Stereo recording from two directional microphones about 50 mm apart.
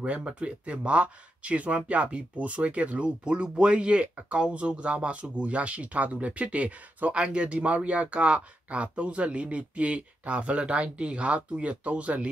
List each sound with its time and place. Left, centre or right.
0.0 s speech: right